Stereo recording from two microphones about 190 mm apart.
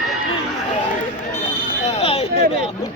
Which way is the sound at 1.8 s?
35° left (ahead or behind).